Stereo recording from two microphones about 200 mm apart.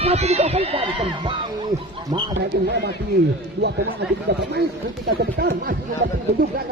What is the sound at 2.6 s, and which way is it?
Speech, 60° right (ahead or behind).